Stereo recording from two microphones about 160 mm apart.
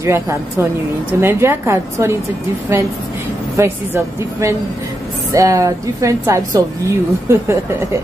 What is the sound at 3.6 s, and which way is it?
A woman's voice, 15° right (ahead or behind).